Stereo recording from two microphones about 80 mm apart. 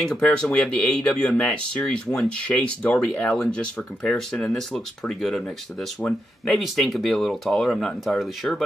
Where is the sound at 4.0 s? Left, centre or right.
Centre.